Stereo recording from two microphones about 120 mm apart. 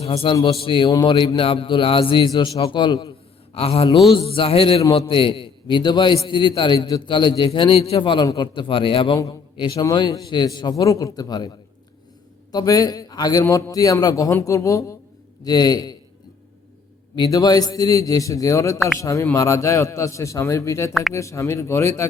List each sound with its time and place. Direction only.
0.0 s a man's voice: 55° left (ahead or behind); by 3.1 s 40° left (ahead or behind)
3.5 s a man's voice: 55° left (ahead or behind)
9.1 s a man's voice: 30° left (ahead or behind)
17.2 s a man's voice: 35° left (ahead or behind)